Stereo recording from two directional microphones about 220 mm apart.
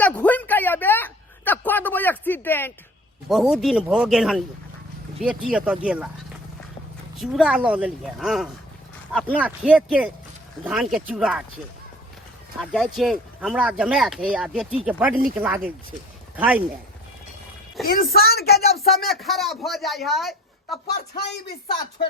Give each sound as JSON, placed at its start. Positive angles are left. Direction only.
{"t": 0.0, "sound": "a sound", "side_deg": 5}
{"t": 3.2, "sound": "speech", "side_deg": 0}
{"t": 7.2, "sound": "speech", "side_deg": -5}
{"t": 12.7, "sound": "speech", "side_deg": 0}
{"t": 17.8, "sound": "a woman's voice", "side_deg": 45}
{"t": 18.9, "sound": "speech", "side_deg": 0}
{"t": 20.8, "sound": "a woman's voice", "side_deg": 45}